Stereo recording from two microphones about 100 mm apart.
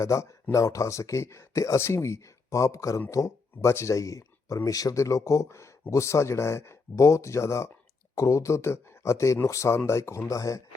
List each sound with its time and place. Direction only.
0.0 s speech: 30° left (ahead or behind)